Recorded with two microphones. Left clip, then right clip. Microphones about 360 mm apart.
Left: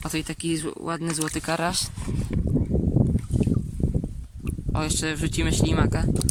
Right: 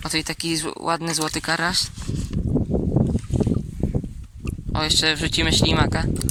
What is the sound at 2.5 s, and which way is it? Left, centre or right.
Boat, right.